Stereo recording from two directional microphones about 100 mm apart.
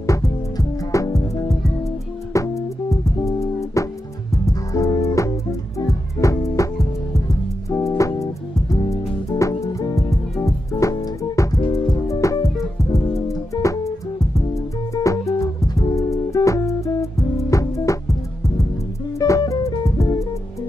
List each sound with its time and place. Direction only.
0.0 s music: 35° left (ahead or behind)
19.1 s music: 35° left (ahead or behind)